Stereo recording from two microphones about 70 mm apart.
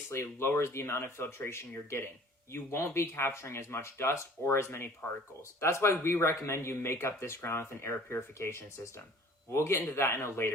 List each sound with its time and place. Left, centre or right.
0.1 s speech: left